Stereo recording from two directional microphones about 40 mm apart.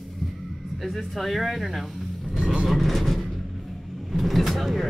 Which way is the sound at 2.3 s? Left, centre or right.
Right.